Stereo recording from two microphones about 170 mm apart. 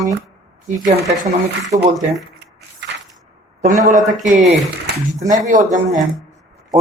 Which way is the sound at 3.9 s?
50° right (ahead or behind).